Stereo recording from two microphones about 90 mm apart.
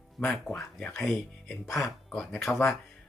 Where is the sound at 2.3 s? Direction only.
25° left (ahead or behind).